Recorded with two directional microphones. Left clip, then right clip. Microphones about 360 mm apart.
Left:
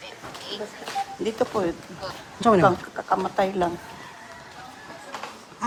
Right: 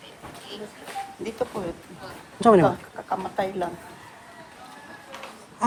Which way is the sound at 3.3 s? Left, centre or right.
Left.